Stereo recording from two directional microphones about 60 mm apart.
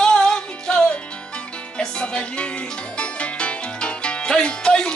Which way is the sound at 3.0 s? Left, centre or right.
Centre.